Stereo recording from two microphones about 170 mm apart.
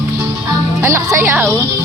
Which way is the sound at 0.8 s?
15° right (ahead or behind).